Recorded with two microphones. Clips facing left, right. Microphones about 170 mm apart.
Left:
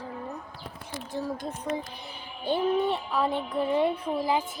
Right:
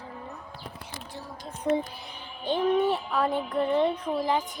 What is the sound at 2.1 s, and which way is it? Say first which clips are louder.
Speech: left 1 dB; 10° left (ahead or behind).